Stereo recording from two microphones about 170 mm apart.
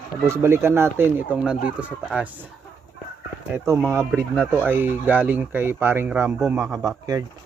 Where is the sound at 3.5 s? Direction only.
15° right (ahead or behind).